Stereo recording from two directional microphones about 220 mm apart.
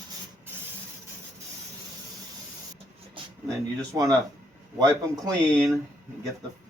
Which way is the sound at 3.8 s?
15° right (ahead or behind).